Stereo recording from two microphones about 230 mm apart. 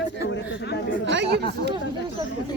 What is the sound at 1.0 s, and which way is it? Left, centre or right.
Speech, right.